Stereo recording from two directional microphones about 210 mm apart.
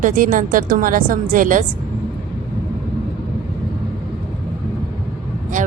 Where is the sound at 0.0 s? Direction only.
40° right (ahead or behind).